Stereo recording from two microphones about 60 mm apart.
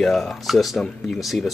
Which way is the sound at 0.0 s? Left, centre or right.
Centre.